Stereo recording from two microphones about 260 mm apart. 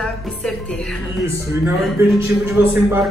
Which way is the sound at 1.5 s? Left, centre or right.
Centre.